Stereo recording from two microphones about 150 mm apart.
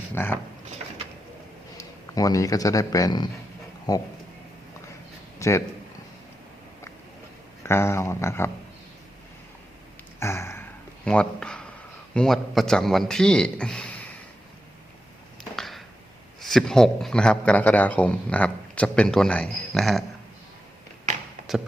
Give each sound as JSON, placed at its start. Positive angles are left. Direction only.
{"t": 0.1, "sound": "speech", "side_deg": 15}
{"t": 1.8, "sound": "speech", "side_deg": 25}
{"t": 5.4, "sound": "a man's voice", "side_deg": 20}
{"t": 7.6, "sound": "a man's voice", "side_deg": 15}
{"t": 10.2, "sound": "a sound", "side_deg": 15}
{"t": 12.1, "sound": "a man's voice", "side_deg": 5}
{"t": 15.5, "sound": "a sound", "side_deg": 0}
{"t": 16.4, "sound": "a man's voice", "side_deg": 0}
{"t": 21.4, "sound": "tap", "side_deg": 0}